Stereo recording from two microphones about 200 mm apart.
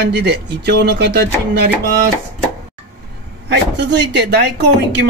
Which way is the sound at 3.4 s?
60° right (ahead or behind).